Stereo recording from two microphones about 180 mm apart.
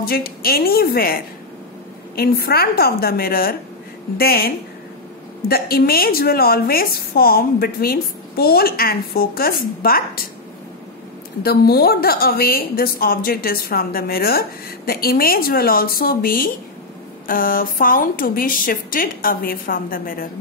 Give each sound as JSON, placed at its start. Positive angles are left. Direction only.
{"t": 0.0, "sound": "a woman's voice", "side_deg": 55}
{"t": 11.4, "sound": "a woman's voice", "side_deg": 60}